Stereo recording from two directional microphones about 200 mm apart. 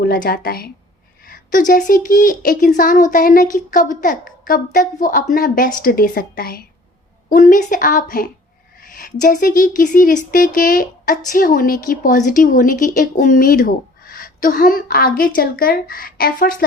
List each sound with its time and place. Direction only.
0.1 s a woman's voice: 50° left (ahead or behind)